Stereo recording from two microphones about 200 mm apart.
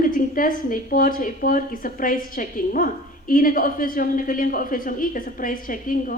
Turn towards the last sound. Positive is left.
turn(degrees=45)  # may be behind; listen again after turning